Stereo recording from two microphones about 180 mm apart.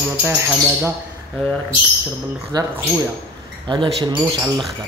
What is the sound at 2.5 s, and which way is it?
Speech, 20° right (ahead or behind).